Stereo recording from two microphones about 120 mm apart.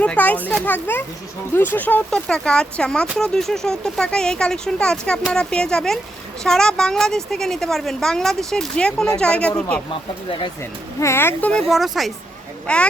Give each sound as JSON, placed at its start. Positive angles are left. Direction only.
{"t": 0.0, "sound": "speech", "side_deg": 10}
{"t": 11.0, "sound": "speech", "side_deg": 20}
{"t": 11.7, "sound": "speech", "side_deg": 0}
{"t": 12.6, "sound": "speech", "side_deg": 10}